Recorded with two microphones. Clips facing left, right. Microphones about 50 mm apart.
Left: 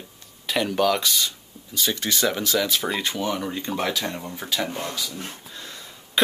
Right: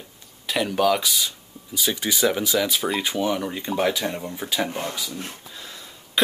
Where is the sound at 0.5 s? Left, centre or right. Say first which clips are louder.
Right 1 dB; centre.